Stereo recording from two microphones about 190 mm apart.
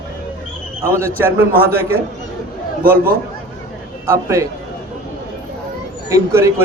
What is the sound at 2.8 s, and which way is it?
Speech, 50° right (ahead or behind).